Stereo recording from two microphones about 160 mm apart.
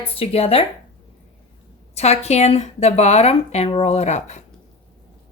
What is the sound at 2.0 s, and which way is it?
Speech, 45° left (ahead or behind).